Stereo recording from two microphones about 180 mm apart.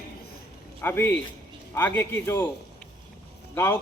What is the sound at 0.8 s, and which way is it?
A man's voice, 10° left (ahead or behind).